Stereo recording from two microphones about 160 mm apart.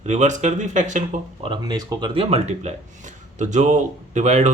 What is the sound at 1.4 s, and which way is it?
Speech, 30° right (ahead or behind).